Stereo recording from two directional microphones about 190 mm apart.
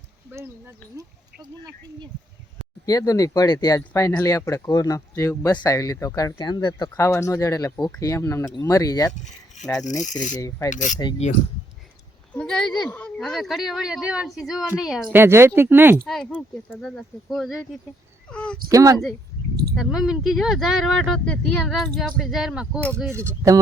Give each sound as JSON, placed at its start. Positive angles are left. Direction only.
{"t": 2.8, "sound": "speech", "side_deg": 20}
{"t": 9.1, "sound": "speech", "side_deg": 40}
{"t": 10.3, "sound": "speech", "side_deg": 15}
{"t": 10.7, "sound": "speech", "side_deg": 40}
{"t": 12.3, "sound": "speech", "side_deg": 5}
{"t": 16.0, "sound": "speech", "side_deg": 5}
{"t": 18.3, "sound": "a sound", "side_deg": 5}
{"t": 18.7, "sound": "speech", "side_deg": -15}
{"t": 19.7, "sound": "speech", "side_deg": 0}
{"t": 23.1, "sound": "speech", "side_deg": -15}